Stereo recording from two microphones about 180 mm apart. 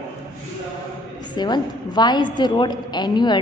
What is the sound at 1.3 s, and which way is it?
A woman's voice, 25° left (ahead or behind).